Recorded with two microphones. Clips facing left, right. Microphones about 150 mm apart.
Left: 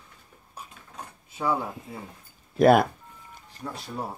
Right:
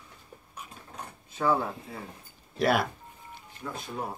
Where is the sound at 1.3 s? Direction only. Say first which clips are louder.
Right 1 dB; 10° left (ahead or behind).